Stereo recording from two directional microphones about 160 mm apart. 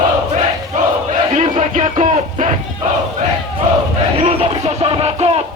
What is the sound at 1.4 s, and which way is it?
Music, 45° right (ahead or behind).